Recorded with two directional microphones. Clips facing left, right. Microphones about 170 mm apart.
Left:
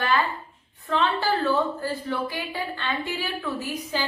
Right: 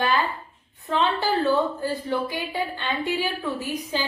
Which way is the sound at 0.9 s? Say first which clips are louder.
Right 1 dB; 20° right (ahead or behind).